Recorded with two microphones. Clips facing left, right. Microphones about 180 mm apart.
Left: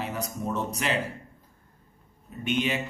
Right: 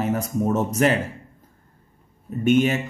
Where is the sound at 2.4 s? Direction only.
45° right (ahead or behind).